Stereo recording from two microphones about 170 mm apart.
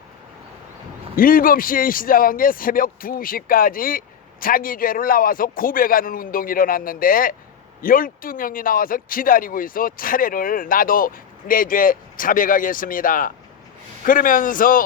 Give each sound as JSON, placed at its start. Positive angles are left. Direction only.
{"t": 1.1, "sound": "a man's voice", "side_deg": 55}